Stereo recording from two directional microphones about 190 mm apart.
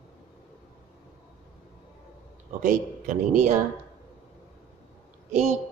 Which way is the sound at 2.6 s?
40° right (ahead or behind).